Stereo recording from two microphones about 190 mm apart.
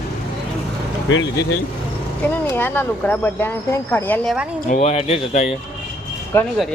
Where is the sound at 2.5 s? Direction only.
10° left (ahead or behind).